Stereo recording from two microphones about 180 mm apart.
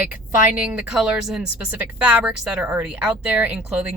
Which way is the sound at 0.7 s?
5° right (ahead or behind).